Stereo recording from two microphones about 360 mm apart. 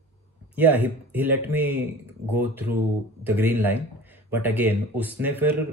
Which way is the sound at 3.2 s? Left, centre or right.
Centre.